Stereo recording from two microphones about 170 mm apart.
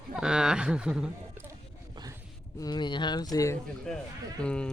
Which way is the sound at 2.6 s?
25° left (ahead or behind).